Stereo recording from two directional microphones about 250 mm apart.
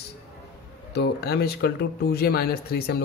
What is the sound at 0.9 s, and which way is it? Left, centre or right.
Speech, left.